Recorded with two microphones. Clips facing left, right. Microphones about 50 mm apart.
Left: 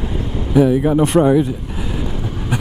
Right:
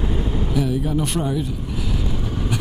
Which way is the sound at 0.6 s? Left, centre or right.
Left.